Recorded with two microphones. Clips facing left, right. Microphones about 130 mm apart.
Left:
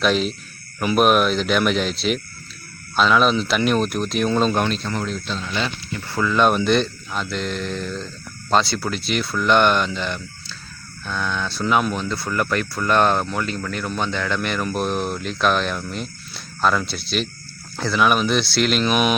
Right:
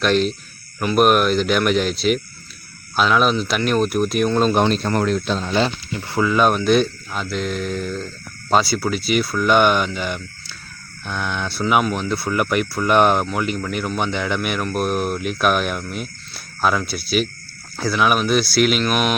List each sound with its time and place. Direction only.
0.0 s speech: centre (ahead or behind)
4.7 s speech: 50° right (ahead or behind)
5.4 s speech: 40° right (ahead or behind)
5.9 s speech: 20° right (ahead or behind); by 19.1 s centre (ahead or behind)